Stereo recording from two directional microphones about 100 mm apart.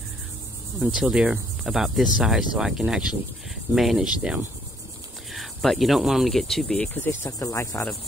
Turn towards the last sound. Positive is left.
turn(degrees=30)  # may be behind; listen again after turning